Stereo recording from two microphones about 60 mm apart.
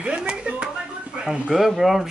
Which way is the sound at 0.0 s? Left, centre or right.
Centre.